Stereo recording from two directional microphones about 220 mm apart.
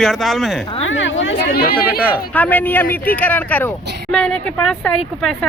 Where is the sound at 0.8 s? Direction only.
60° left (ahead or behind); by 1.7 s 45° left (ahead or behind).